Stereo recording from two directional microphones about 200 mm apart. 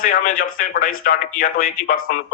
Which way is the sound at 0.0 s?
45° left (ahead or behind).